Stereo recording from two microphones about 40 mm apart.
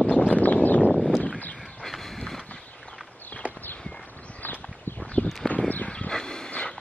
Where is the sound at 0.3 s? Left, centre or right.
Left.